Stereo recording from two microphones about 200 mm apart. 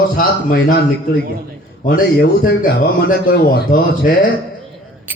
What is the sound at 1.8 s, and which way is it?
Speech, 50° left (ahead or behind).